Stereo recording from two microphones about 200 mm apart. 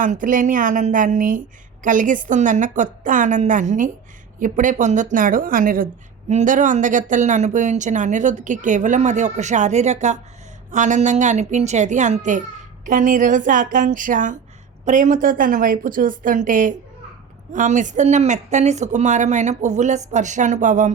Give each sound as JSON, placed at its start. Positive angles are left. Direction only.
{"t": 0.0, "sound": "a woman's voice", "side_deg": -40}